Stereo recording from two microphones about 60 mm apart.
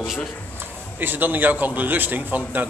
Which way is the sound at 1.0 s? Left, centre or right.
Right.